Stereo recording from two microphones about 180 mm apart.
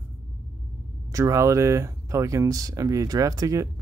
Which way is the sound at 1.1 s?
15° right (ahead or behind).